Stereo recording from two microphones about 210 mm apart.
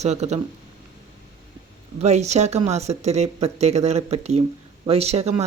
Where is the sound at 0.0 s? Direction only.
30° right (ahead or behind).